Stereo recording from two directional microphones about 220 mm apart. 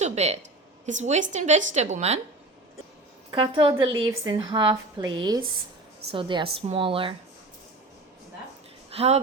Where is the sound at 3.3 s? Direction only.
25° right (ahead or behind).